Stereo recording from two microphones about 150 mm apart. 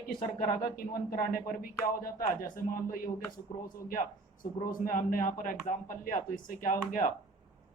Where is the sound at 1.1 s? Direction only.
70° left (ahead or behind).